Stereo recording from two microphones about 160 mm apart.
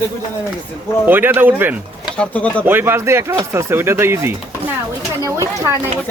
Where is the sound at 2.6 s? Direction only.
15° right (ahead or behind).